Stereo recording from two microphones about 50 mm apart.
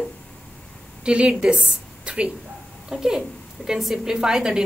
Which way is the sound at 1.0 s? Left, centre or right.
Centre.